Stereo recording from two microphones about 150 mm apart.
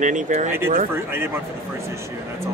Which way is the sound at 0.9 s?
15° right (ahead or behind).